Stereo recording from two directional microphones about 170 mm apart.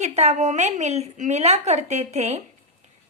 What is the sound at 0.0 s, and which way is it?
A woman's voice, 40° right (ahead or behind).